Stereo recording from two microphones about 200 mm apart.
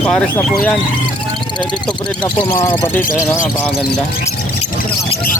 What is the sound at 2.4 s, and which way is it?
Speech, 25° left (ahead or behind).